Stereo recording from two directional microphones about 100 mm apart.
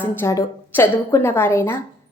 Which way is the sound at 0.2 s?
25° left (ahead or behind).